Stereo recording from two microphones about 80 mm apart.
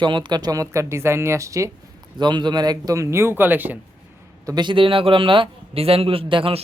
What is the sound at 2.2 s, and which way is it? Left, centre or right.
Speech, right.